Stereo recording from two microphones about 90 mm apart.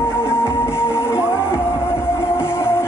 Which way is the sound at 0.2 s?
25° left (ahead or behind).